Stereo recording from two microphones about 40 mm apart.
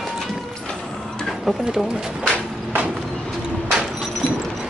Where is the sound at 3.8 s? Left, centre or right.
Centre.